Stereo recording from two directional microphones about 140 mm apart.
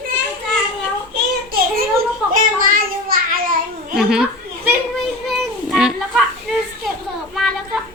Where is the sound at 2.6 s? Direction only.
90° right.